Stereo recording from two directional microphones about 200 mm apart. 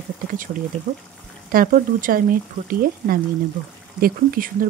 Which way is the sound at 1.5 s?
45° right (ahead or behind).